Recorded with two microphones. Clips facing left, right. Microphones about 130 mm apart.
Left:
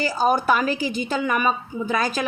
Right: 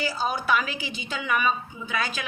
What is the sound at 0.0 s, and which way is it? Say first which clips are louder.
A woman's voice: left 7 dB; 45° left (ahead or behind).